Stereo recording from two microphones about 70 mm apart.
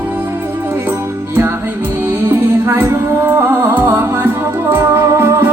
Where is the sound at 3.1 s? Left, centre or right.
Right.